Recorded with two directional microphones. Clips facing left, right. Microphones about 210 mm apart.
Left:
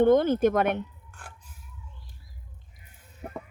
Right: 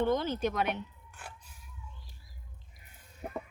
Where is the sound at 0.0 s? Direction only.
55° left (ahead or behind).